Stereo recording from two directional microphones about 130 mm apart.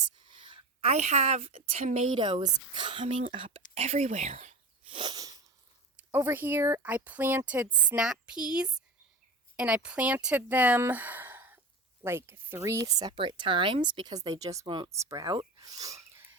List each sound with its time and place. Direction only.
0.3 s a sound: 40° right (ahead or behind)
1.8 s speech: 60° right (ahead or behind)
2.1 s a woman's voice: 40° right (ahead or behind)
3.8 s speech: 55° right (ahead or behind)
4.9 s sneeze: 45° right (ahead or behind)
6.0 s speech: 15° right (ahead or behind)
9.6 s speech: 10° right (ahead or behind); by 15.4 s 25° right (ahead or behind)
15.5 s a sound: 30° right (ahead or behind)